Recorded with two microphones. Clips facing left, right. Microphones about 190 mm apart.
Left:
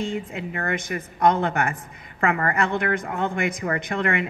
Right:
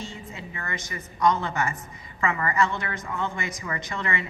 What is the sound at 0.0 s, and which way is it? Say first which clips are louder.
A woman's voice: left 10 dB; 60° left (ahead or behind).